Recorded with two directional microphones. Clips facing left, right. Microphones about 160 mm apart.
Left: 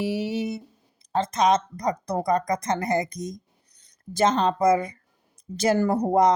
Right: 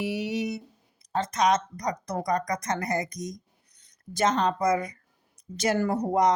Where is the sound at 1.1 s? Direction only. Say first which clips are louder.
Left 3 dB; 30° left (ahead or behind).